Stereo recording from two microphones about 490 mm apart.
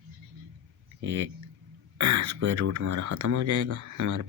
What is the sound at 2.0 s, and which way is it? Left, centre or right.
Speech, right.